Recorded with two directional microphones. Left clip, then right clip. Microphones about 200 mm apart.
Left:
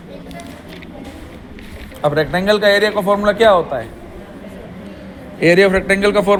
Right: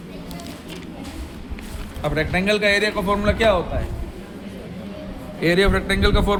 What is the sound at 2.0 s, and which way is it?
A man's voice, 20° left (ahead or behind).